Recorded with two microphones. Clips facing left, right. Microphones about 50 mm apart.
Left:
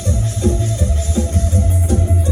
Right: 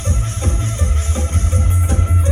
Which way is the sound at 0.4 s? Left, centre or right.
Right.